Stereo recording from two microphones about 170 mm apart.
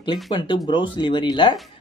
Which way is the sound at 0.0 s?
30° left (ahead or behind).